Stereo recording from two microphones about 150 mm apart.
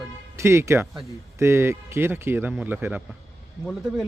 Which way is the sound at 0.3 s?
20° right (ahead or behind).